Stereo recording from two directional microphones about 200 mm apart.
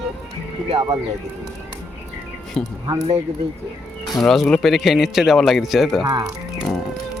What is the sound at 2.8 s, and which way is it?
Speech, 25° right (ahead or behind).